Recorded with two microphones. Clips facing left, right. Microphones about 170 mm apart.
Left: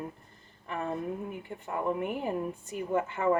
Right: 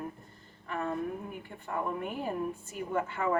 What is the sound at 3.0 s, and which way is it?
Speech, 20° left (ahead or behind).